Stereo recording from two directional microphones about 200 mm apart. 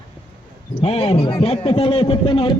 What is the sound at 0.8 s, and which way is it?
A man's voice, 30° left (ahead or behind).